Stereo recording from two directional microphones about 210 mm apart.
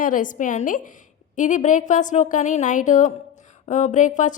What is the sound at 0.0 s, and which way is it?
A woman's voice, 40° left (ahead or behind).